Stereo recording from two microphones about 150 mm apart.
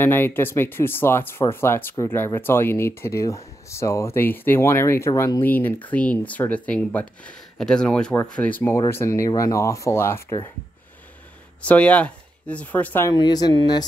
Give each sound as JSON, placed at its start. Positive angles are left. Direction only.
{"t": 0.0, "sound": "speech", "side_deg": 15}
{"t": 11.6, "sound": "speech", "side_deg": 10}
{"t": 13.1, "sound": "speech", "side_deg": 30}